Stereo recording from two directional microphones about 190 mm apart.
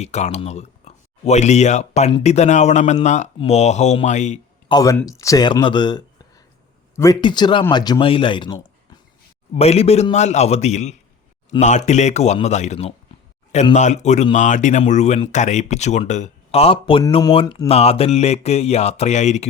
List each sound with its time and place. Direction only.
0.0 s speech: 35° left (ahead or behind)
4.7 s speech: 20° left (ahead or behind); by 19.5 s 35° left (ahead or behind)